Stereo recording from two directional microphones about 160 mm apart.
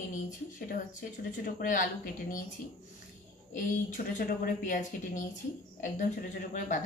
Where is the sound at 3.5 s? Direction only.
55° left (ahead or behind).